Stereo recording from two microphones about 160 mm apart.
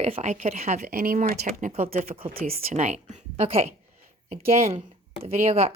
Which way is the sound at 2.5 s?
45° right (ahead or behind).